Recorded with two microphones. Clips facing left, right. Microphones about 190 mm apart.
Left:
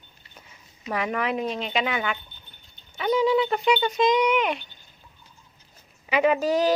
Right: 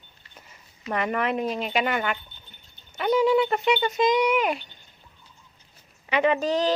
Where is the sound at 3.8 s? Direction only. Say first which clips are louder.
Even; 5° right (ahead or behind).